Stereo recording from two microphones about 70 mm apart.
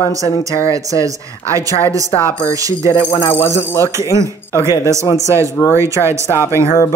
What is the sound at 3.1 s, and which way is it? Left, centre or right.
Speech, left.